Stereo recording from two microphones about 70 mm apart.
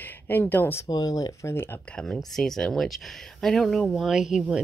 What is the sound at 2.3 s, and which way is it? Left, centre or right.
Speech, centre.